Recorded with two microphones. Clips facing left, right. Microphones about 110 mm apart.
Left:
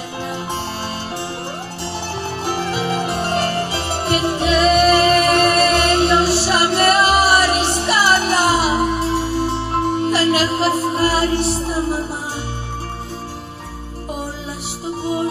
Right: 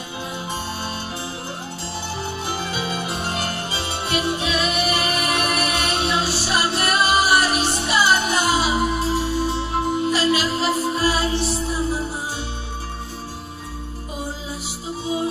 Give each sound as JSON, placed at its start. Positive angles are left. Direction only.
{"t": 2.4, "sound": "music", "side_deg": 55}